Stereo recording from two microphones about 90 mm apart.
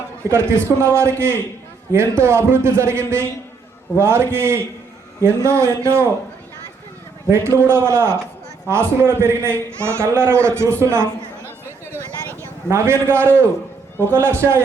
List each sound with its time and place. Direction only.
0.3 s a man's voice: 30° right (ahead or behind)
7.3 s a man's voice: 30° right (ahead or behind)
12.4 s a man's voice: 30° right (ahead or behind)